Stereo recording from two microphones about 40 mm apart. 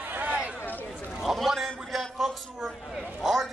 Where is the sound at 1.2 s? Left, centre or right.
Centre.